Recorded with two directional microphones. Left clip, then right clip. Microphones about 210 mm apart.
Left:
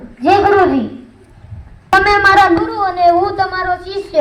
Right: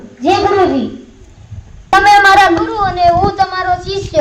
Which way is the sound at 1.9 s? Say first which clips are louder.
Right 3 dB; 45° left (ahead or behind).